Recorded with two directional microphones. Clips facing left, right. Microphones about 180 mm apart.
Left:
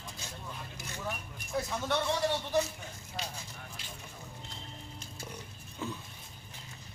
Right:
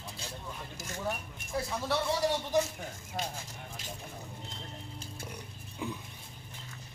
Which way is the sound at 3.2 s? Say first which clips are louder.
Right 4 dB; 50° right (ahead or behind).